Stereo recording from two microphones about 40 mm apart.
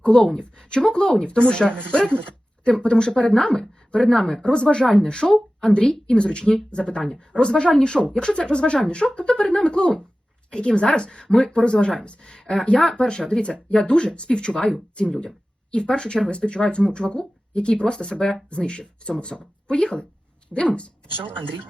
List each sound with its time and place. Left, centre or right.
0.0 s a woman's voice: left
12.3 s a woman's voice: centre